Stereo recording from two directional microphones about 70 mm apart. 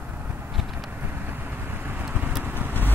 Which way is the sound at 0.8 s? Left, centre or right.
Right.